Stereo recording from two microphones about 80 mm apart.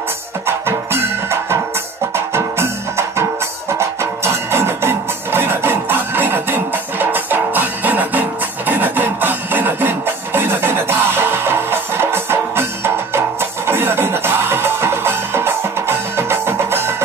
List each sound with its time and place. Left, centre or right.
0.5 s music: right